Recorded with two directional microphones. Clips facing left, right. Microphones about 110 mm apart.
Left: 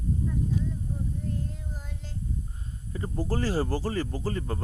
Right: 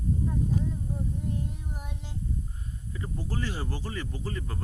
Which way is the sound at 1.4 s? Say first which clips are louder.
Right 1 dB; 15° right (ahead or behind).